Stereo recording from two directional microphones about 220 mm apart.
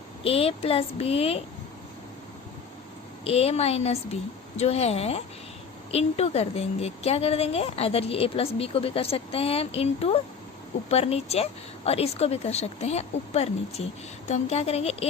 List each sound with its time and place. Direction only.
0.3 s a woman's voice: 25° left (ahead or behind)
3.2 s a woman's voice: 30° left (ahead or behind)